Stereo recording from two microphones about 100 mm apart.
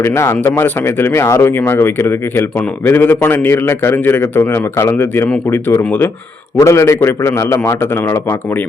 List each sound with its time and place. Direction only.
0.0 s speech: 25° left (ahead or behind)
6.6 s speech: 30° left (ahead or behind)